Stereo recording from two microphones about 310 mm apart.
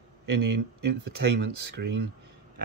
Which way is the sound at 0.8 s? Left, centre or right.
Right.